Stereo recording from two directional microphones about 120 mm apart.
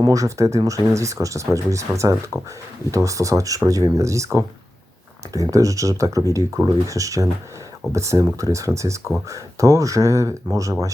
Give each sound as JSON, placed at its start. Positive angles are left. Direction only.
{"t": 0.0, "sound": "speech", "side_deg": -30}